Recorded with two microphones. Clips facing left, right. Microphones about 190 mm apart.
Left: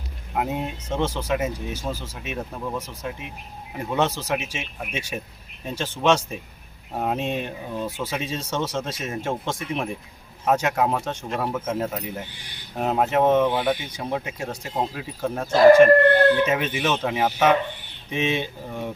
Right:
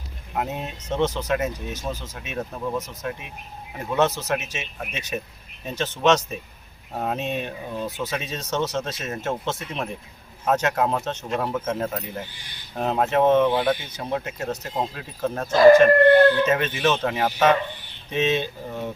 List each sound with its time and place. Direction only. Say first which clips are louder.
0.3 s speech: left 2 dB; 10° left (ahead or behind)